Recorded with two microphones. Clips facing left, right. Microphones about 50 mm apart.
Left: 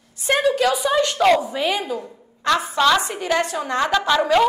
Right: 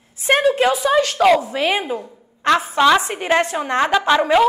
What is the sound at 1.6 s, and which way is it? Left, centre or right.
A woman's voice, right.